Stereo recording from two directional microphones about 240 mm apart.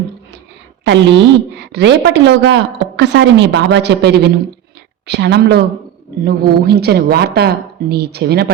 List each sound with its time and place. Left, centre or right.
0.9 s a woman's voice: right